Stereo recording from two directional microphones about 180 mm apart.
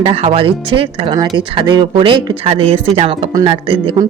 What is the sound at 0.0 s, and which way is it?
Speech, 35° right (ahead or behind).